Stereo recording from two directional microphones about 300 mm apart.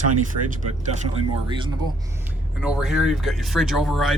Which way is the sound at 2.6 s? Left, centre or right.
Centre.